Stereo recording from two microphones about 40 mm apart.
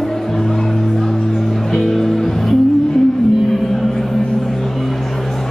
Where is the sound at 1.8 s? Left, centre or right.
Centre.